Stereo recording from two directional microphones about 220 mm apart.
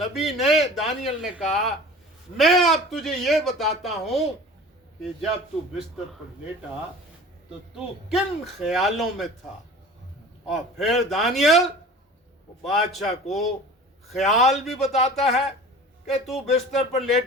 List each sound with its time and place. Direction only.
0.0 s a man's voice: centre (ahead or behind)
7.8 s a man's voice: centre (ahead or behind)
10.5 s a man's voice: centre (ahead or behind)
12.6 s a man's voice: centre (ahead or behind)